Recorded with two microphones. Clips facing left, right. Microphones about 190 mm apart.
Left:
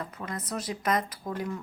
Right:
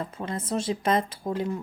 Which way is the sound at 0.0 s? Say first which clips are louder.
Right 4 dB; 25° right (ahead or behind).